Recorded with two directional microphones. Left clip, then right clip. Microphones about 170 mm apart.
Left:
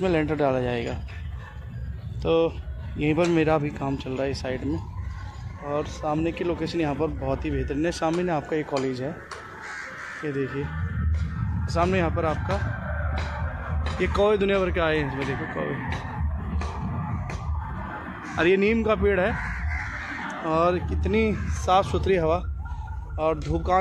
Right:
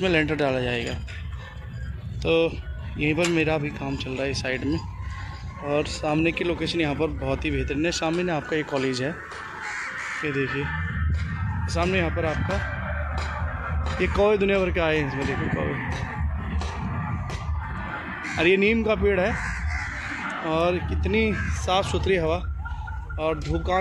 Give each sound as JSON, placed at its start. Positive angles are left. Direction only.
{"t": 0.0, "sound": "speech", "side_deg": 0}
{"t": 2.2, "sound": "speech", "side_deg": 0}
{"t": 6.0, "sound": "speech", "side_deg": -20}
{"t": 6.3, "sound": "speech", "side_deg": -5}
{"t": 10.2, "sound": "speech", "side_deg": -5}
{"t": 13.9, "sound": "speech", "side_deg": -5}
{"t": 18.2, "sound": "speech", "side_deg": 0}
{"t": 20.4, "sound": "speech", "side_deg": 0}